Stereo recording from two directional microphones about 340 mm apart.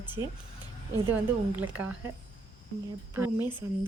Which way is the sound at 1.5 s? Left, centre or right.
Centre.